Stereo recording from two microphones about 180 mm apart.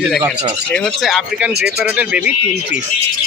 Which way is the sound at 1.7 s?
5° right (ahead or behind).